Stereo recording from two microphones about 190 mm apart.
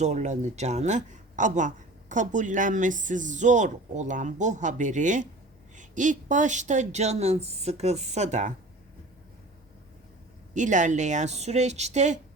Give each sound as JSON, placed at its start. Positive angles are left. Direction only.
{"t": 0.0, "sound": "a man's voice", "side_deg": -40}
{"t": 10.5, "sound": "a man's voice", "side_deg": -40}